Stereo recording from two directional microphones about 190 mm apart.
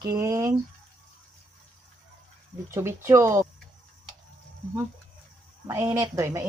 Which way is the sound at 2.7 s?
15° right (ahead or behind).